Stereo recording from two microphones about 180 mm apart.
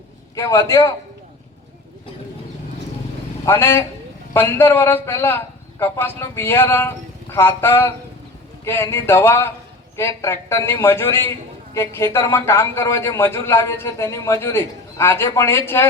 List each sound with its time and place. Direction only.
0.3 s a man's voice: 15° left (ahead or behind)
3.4 s a man's voice: 15° left (ahead or behind)